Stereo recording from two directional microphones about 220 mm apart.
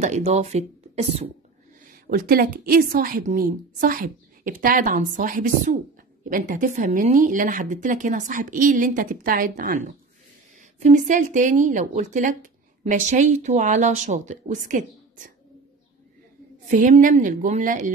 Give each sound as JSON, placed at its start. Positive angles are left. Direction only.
{"t": 0.0, "sound": "speech", "side_deg": -30}
{"t": 1.9, "sound": "a woman's voice", "side_deg": -40}
{"t": 16.6, "sound": "a woman's voice", "side_deg": -35}